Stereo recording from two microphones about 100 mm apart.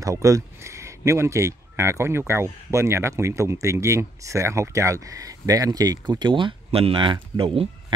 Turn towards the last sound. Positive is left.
turn(degrees=-70)  # may be behind; listen again after turning